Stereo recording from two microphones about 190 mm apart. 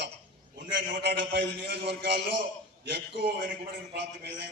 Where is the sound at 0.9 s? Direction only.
65° right (ahead or behind).